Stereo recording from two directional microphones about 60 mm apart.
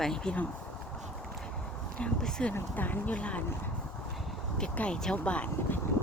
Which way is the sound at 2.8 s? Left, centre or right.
Left.